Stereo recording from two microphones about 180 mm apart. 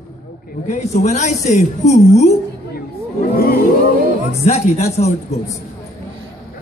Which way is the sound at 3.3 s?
55° left (ahead or behind).